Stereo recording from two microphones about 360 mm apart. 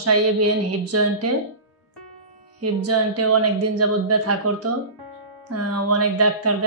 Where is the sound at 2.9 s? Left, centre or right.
Right.